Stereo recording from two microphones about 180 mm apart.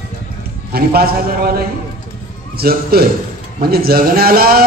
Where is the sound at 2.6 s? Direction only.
60° right (ahead or behind).